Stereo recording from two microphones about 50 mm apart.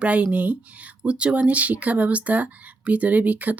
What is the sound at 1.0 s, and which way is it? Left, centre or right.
Speech, right.